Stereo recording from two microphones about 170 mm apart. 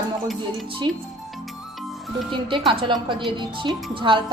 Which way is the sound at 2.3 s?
30° right (ahead or behind).